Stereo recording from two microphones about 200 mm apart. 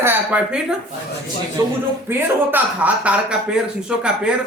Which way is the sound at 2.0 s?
10° right (ahead or behind).